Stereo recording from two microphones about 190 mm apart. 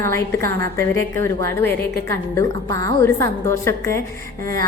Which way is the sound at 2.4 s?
15° left (ahead or behind).